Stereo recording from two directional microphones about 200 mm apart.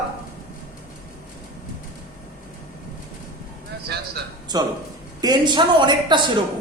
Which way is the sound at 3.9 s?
55° right (ahead or behind).